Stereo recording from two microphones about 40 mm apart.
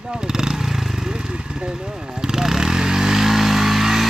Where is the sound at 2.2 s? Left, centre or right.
Centre.